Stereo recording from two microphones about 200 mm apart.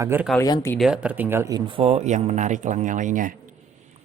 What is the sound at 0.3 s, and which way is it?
Speech, 15° left (ahead or behind).